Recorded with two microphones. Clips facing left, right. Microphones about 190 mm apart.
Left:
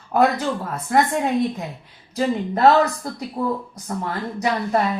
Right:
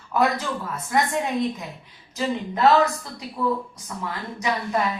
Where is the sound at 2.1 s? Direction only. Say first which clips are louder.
Left 5 dB; 40° left (ahead or behind).